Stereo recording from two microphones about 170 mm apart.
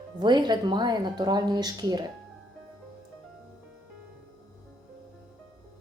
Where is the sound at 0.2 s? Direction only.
25° right (ahead or behind).